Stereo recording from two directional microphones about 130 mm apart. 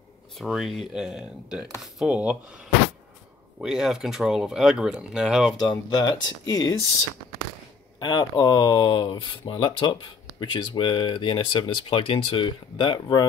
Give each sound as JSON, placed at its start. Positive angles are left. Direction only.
{"t": 0.4, "sound": "speech", "side_deg": 0}
{"t": 3.6, "sound": "speech", "side_deg": -5}
{"t": 5.6, "sound": "speech", "side_deg": 35}
{"t": 8.0, "sound": "speech", "side_deg": 35}